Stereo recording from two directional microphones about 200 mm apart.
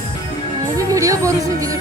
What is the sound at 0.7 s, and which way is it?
Music, 15° right (ahead or behind).